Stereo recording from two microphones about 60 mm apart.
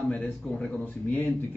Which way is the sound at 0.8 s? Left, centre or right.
Left.